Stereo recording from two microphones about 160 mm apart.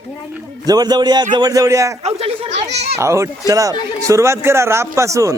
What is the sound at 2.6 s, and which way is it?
Children playing, 90° right.